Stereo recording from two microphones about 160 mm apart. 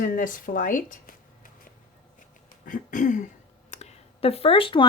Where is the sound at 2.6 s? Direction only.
55° left (ahead or behind).